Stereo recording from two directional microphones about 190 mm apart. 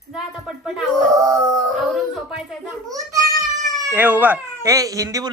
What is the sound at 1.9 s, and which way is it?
A child's voice, centre (ahead or behind).